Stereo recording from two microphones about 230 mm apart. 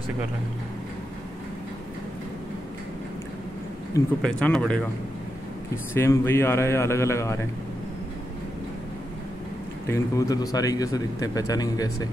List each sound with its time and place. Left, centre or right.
4.2 s speech: centre
5.9 s a man's voice: centre
9.8 s a man's voice: centre